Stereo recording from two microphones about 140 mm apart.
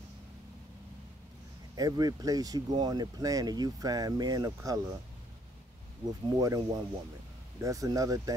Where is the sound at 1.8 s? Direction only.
25° right (ahead or behind).